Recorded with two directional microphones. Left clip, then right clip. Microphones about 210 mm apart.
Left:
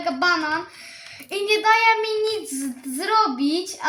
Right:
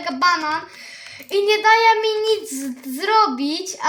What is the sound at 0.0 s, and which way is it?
A woman's voice, 50° right (ahead or behind).